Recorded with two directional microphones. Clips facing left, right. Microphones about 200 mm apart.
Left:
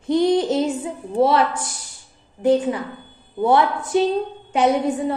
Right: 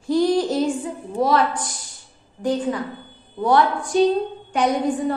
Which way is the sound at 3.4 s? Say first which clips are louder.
Left 1 dB; 25° left (ahead or behind).